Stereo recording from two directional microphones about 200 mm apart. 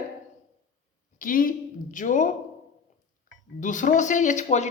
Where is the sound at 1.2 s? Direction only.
45° left (ahead or behind).